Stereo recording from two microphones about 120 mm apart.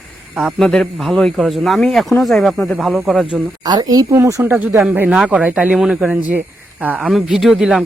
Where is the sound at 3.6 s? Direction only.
35° right (ahead or behind).